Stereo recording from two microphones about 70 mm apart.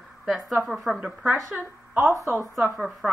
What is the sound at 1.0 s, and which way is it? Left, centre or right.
Speech, centre.